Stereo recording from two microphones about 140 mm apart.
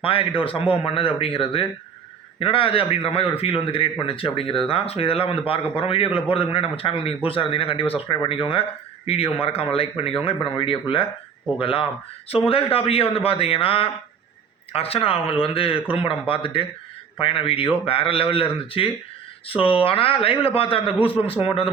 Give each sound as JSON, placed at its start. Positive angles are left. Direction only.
{"t": 0.0, "sound": "speech", "side_deg": 40}